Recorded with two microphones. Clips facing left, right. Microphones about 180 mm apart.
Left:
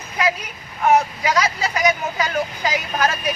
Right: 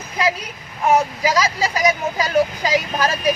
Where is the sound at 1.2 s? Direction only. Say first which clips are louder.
Right 2 dB; 30° right (ahead or behind).